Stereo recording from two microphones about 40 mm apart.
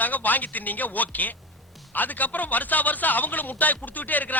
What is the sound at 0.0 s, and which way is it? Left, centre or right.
A man's voice, left.